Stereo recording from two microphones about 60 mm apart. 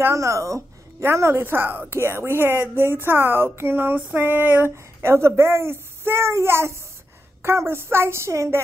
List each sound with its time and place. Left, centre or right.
0.0 s a woman's voice: right
1.0 s a child's voice: right
1.4 s a sound: right
4.6 s a child's voice: right